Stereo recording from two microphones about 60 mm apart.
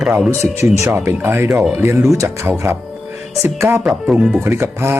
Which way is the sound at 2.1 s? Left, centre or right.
Right.